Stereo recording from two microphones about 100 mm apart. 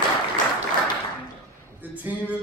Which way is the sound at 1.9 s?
15° right (ahead or behind).